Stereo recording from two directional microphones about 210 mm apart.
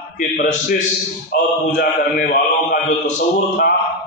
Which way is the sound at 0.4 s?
40° left (ahead or behind).